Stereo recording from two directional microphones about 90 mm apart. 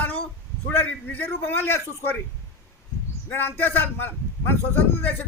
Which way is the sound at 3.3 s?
20° left (ahead or behind).